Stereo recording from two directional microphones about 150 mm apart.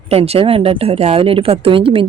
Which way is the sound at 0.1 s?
40° right (ahead or behind).